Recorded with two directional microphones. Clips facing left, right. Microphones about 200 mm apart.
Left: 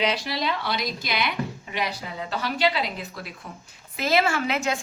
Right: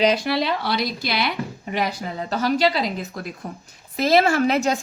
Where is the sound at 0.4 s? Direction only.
35° right (ahead or behind).